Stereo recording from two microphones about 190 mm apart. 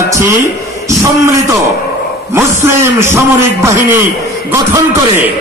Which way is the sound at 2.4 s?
15° right (ahead or behind).